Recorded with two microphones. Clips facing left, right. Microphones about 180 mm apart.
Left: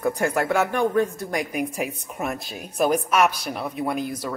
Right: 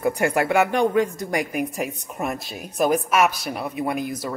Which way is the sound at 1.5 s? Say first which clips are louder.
Right 1 dB; centre (ahead or behind).